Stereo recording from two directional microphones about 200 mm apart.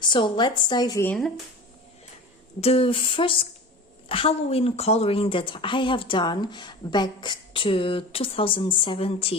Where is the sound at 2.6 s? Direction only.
30° left (ahead or behind).